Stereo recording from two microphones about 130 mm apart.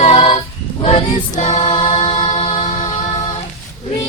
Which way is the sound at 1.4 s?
65° left (ahead or behind).